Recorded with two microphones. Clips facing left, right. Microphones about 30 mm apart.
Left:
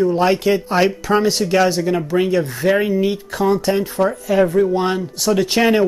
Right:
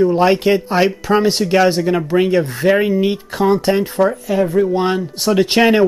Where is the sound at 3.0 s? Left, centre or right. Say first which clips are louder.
Right 2 dB; right.